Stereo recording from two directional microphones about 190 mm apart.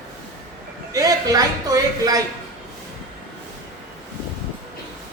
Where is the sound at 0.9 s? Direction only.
20° right (ahead or behind).